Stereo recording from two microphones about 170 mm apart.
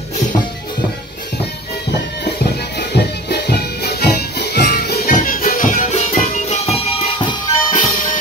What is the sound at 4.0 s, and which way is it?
Music, 65° left (ahead or behind).